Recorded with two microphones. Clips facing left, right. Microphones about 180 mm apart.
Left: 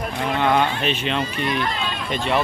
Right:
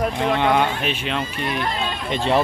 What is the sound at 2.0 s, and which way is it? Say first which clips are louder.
Speech: right 3 dB; 30° right (ahead or behind).